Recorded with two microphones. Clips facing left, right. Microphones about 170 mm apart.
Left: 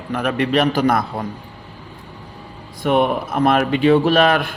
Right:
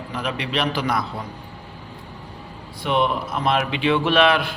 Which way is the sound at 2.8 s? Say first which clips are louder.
Left 5 dB; 50° left (ahead or behind).